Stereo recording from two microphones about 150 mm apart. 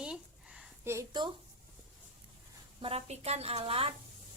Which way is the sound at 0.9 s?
20° right (ahead or behind).